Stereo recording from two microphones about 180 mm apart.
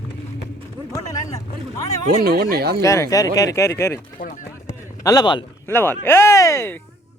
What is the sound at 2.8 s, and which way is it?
Speech, 15° left (ahead or behind).